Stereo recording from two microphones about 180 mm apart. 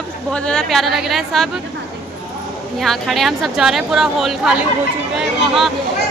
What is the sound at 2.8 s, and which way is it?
A woman's voice, centre (ahead or behind).